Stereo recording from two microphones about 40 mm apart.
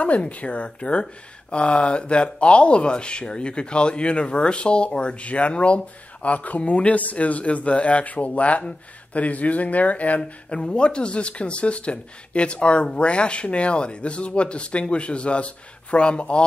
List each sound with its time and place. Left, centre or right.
0.3 s speech: left
10.6 s speech: left